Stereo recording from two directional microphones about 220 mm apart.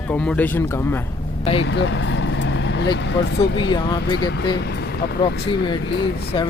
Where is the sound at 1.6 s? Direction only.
55° left (ahead or behind).